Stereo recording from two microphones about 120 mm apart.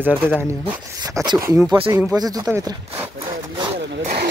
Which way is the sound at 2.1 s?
35° right (ahead or behind).